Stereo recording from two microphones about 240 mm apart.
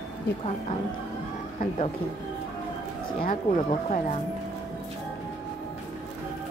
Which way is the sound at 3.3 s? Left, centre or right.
Left.